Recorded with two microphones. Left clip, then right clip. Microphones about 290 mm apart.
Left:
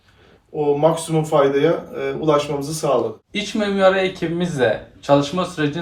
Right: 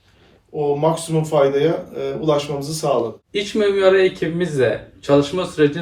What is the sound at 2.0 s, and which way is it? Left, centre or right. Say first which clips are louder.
Speech: left 1 dB; centre.